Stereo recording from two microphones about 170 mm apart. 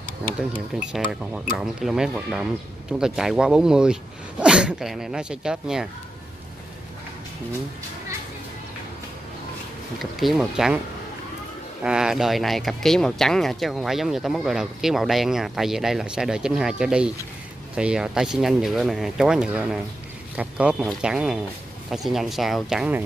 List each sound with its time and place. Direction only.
0.7 s speech: 5° right (ahead or behind)
9.9 s speech: centre (ahead or behind)
11.8 s speech: 5° right (ahead or behind)